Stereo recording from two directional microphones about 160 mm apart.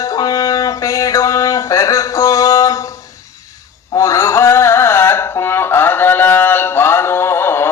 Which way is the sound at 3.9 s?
20° left (ahead or behind).